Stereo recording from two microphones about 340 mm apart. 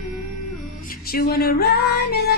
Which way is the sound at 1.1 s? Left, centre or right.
Left.